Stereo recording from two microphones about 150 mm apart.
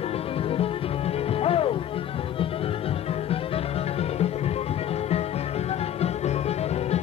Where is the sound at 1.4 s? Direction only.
40° left (ahead or behind).